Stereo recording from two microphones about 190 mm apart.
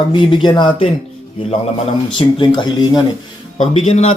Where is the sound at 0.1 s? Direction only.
25° left (ahead or behind).